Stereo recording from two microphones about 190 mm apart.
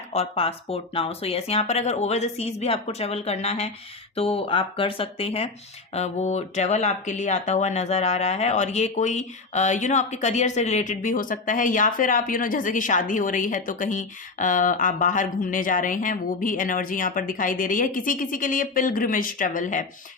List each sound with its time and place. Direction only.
0.1 s speech: 30° left (ahead or behind)